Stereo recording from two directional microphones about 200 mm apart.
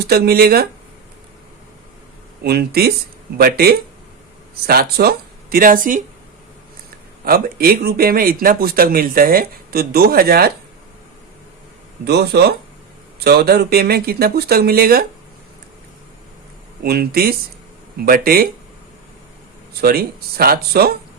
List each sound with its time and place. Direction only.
0.1 s speech: 50° right (ahead or behind)
2.4 s speech: 50° right (ahead or behind)
7.3 s speech: 50° right (ahead or behind)
12.0 s speech: 55° right (ahead or behind)
16.8 s speech: 50° right (ahead or behind)
19.8 s speech: 50° right (ahead or behind)